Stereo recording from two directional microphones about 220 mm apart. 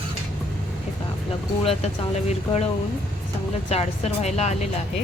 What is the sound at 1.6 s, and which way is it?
Speech, 30° left (ahead or behind).